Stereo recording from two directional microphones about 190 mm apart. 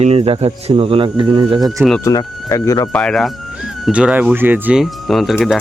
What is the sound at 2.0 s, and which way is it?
Speech, 20° left (ahead or behind).